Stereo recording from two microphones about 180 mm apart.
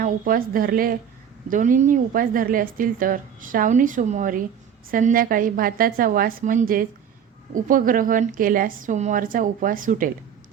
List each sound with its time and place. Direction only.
0.0 s a woman's voice: 50° right (ahead or behind)